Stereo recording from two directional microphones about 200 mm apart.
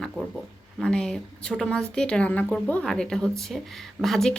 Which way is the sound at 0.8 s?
5° left (ahead or behind).